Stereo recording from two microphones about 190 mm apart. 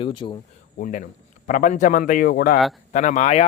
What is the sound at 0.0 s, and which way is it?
Speech, 25° left (ahead or behind).